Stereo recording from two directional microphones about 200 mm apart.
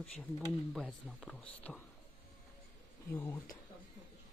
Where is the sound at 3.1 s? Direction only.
15° left (ahead or behind).